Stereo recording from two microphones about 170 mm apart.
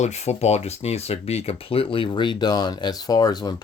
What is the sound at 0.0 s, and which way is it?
Speech, 40° left (ahead or behind).